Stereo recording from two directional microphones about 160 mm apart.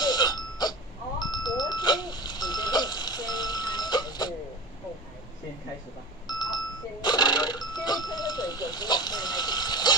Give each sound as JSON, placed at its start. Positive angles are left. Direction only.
{"t": 0.0, "sound": "burping", "side_deg": 25}
{"t": 1.2, "sound": "a sound", "side_deg": 25}
{"t": 6.2, "sound": "music", "side_deg": 25}